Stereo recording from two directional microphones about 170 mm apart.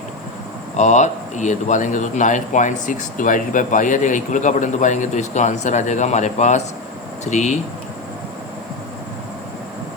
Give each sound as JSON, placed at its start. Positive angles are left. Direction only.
{"t": 0.8, "sound": "a man's voice", "side_deg": 45}